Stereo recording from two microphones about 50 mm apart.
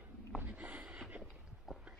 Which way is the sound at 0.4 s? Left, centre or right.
Right.